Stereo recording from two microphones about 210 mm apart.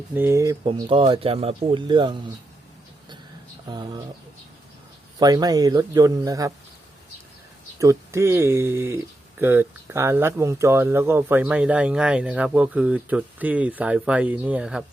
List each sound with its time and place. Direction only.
0.1 s speech: 10° right (ahead or behind)
3.7 s speech: 20° right (ahead or behind)
5.2 s speech: 20° right (ahead or behind)
7.8 s speech: 15° right (ahead or behind)